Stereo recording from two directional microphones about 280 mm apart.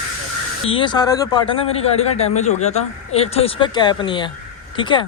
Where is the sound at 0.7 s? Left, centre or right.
Centre.